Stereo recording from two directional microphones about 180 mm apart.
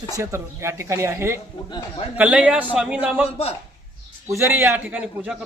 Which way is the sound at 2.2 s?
5° right (ahead or behind).